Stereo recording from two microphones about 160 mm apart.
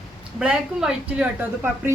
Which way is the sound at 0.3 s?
5° right (ahead or behind).